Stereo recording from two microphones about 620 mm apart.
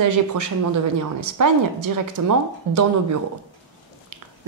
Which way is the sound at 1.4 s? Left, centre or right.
Right.